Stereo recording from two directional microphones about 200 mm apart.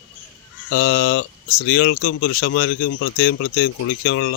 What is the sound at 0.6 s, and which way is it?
Speech, 65° left (ahead or behind).